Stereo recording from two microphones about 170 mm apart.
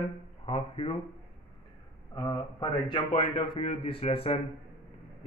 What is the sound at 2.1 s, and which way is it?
A man's voice, 25° left (ahead or behind).